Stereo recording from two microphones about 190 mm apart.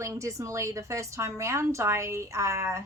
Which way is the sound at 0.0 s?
15° right (ahead or behind).